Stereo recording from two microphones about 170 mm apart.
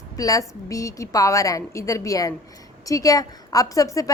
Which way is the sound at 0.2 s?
20° left (ahead or behind).